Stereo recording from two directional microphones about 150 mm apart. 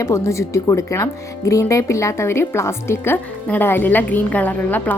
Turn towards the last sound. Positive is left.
turn(degrees=10)  # may be behind; listen again after turning